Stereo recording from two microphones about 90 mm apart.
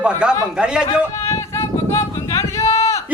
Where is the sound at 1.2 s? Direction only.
35° left (ahead or behind).